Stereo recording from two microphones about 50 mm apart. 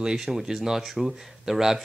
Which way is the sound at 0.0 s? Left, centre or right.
Centre.